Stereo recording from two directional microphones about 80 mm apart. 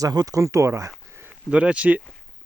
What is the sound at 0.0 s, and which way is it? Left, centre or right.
Speech, right.